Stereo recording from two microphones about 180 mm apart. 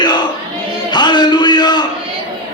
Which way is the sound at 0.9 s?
25° left (ahead or behind).